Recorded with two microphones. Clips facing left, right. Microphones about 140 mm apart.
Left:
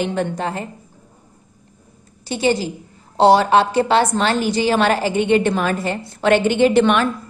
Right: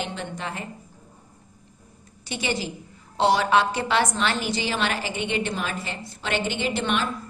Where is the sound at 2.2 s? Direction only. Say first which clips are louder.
Left 9 dB; 35° left (ahead or behind); by 7.0 s 65° left (ahead or behind).